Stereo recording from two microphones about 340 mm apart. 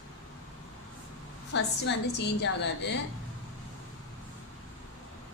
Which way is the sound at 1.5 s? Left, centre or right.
Left.